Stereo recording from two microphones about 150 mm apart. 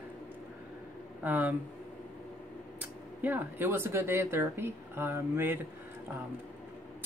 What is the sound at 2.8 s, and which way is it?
Speech, 10° right (ahead or behind).